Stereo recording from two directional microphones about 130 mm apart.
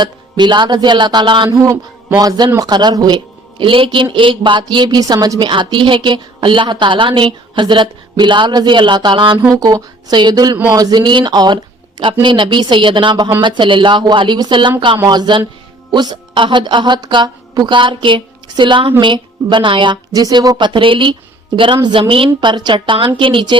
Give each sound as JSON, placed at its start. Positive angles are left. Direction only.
{"t": 0.0, "sound": "a woman's voice", "side_deg": -35}
{"t": 1.5, "sound": "a man's voice", "side_deg": -25}